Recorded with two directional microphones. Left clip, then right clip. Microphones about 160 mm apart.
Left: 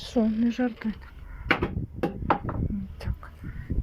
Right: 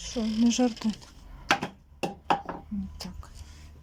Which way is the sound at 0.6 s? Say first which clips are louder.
Right 2 dB; 15° right (ahead or behind).